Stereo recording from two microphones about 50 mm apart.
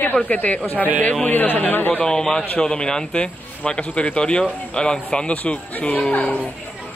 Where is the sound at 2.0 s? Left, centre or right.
Centre.